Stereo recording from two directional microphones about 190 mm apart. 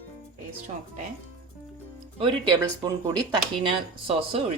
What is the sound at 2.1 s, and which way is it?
Speech, 25° right (ahead or behind).